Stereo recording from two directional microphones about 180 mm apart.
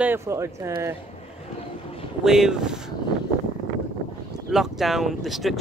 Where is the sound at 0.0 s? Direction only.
15° right (ahead or behind).